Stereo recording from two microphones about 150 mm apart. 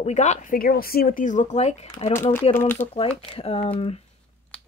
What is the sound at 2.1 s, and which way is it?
Speech, 15° left (ahead or behind).